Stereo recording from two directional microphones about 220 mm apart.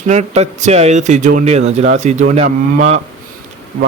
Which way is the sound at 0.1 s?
30° right (ahead or behind).